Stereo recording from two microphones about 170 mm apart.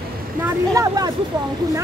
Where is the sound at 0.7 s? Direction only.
20° right (ahead or behind).